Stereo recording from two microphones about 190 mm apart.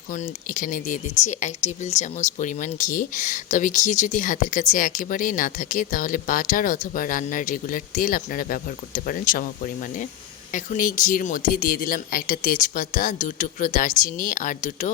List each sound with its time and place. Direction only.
0.1 s speech: 45° left (ahead or behind)
10.5 s speech: 45° left (ahead or behind)